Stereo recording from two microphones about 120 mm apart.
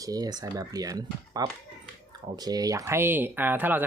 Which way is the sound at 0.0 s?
30° right (ahead or behind).